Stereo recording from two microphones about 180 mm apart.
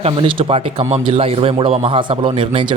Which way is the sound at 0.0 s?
30° right (ahead or behind).